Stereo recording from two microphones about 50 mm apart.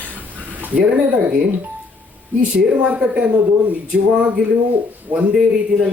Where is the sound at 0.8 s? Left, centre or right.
Right.